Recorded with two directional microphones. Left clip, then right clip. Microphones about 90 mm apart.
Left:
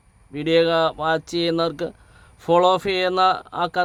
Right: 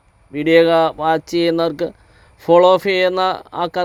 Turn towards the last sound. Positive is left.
turn(degrees=-10)  # may be behind; listen again after turning